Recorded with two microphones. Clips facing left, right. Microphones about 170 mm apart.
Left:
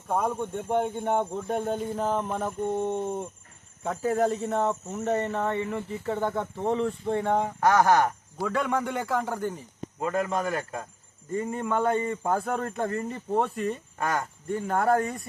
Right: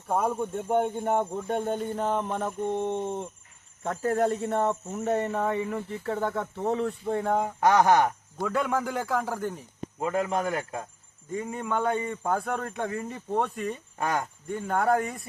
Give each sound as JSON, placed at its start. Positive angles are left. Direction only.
{"t": 0.1, "sound": "a man's voice", "side_deg": -5}
{"t": 5.6, "sound": "speech", "side_deg": 5}
{"t": 7.6, "sound": "a man's voice", "side_deg": -15}
{"t": 8.4, "sound": "speech", "side_deg": 0}
{"t": 10.0, "sound": "a man's voice", "side_deg": -15}
{"t": 11.3, "sound": "speech", "side_deg": 0}
{"t": 14.0, "sound": "a man's voice", "side_deg": -15}
{"t": 14.5, "sound": "speech", "side_deg": 0}